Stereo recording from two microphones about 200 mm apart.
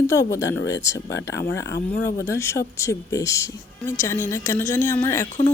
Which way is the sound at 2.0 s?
15° left (ahead or behind).